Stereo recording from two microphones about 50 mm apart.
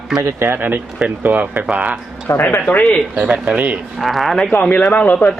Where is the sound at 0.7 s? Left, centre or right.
Right.